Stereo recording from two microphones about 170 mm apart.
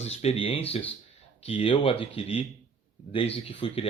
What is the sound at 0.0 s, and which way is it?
Speech, 40° left (ahead or behind).